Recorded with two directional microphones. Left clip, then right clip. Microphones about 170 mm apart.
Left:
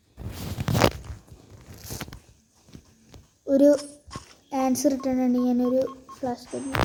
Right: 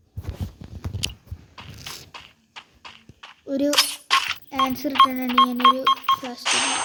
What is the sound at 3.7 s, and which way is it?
Coin, 75° right (ahead or behind).